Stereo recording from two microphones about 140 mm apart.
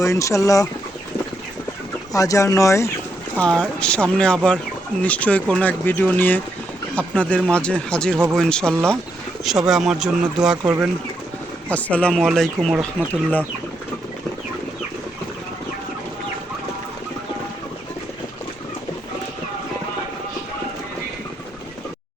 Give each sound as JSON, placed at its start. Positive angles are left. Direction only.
{"t": 0.0, "sound": "speech", "side_deg": 20}
{"t": 2.1, "sound": "speech", "side_deg": 25}
{"t": 3.3, "sound": "speech", "side_deg": 5}
{"t": 11.7, "sound": "speech", "side_deg": 10}